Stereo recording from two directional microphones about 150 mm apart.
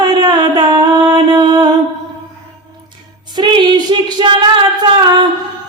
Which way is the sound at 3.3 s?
30° right (ahead or behind).